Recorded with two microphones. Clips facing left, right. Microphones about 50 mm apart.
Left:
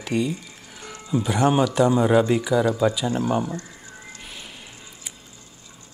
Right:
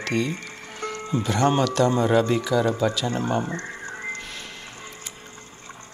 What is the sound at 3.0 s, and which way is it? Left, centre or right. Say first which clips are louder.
Speech: left 2 dB; right.